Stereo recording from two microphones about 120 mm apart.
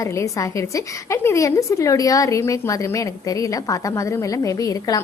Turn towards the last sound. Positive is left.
turn(degrees=30)  # may be behind; listen again after turning